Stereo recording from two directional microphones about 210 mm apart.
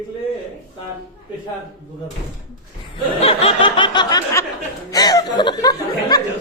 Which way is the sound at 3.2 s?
25° left (ahead or behind).